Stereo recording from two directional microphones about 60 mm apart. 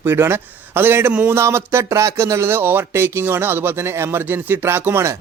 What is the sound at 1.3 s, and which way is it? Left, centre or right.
Speech, right.